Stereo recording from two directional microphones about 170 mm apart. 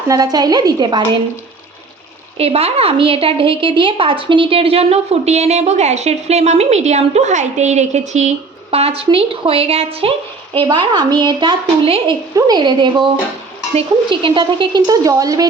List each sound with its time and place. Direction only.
0.1 s speech: 20° right (ahead or behind)
2.4 s a woman's voice: 35° right (ahead or behind)
12.3 s speech: 20° right (ahead or behind)